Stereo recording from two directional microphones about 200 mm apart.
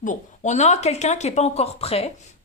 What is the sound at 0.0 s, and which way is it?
A woman's voice, 40° left (ahead or behind).